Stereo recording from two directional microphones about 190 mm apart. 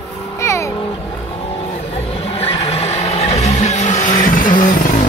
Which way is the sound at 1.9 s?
30° left (ahead or behind).